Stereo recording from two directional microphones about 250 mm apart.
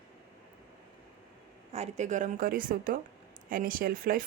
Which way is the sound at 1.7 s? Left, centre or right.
Right.